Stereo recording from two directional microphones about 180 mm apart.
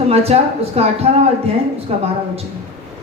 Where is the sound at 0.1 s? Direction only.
35° right (ahead or behind).